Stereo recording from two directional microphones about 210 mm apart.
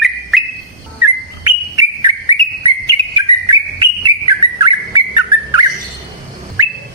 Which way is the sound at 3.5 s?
20° right (ahead or behind).